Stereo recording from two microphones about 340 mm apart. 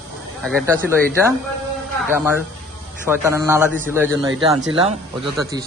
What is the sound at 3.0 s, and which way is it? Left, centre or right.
Speech, centre.